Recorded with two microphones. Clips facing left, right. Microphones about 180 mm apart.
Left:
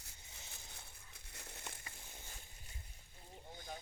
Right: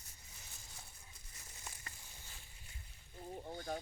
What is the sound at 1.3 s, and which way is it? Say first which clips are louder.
Crumpling: left 4 dB; 65° left (ahead or behind).